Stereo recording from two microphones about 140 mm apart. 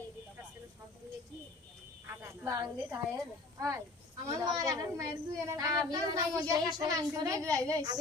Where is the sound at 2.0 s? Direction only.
20° right (ahead or behind).